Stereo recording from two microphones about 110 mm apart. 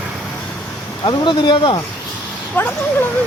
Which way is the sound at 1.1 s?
45° left (ahead or behind).